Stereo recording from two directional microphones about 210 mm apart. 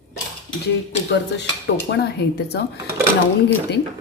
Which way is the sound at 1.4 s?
55° left (ahead or behind).